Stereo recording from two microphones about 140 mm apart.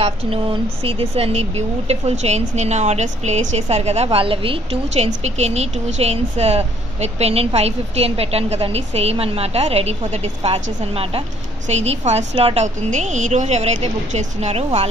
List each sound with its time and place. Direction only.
0.0 s speech: 40° right (ahead or behind)
12.6 s speech: 60° right (ahead or behind)